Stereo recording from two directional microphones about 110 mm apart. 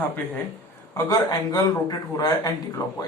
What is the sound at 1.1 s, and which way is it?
Speech, 35° left (ahead or behind).